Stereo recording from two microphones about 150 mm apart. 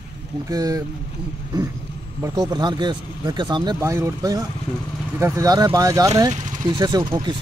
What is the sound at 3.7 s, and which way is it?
Speech, 20° right (ahead or behind).